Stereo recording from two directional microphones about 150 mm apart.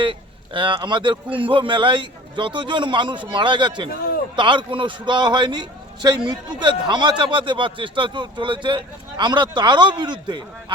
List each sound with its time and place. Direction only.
0.0 s a man's voice: 35° right (ahead or behind)